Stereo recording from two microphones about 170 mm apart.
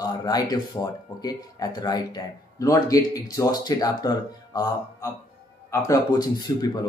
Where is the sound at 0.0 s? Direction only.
25° left (ahead or behind).